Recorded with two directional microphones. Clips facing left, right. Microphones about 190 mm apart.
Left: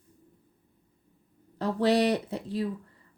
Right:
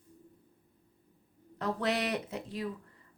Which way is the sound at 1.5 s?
30° left (ahead or behind).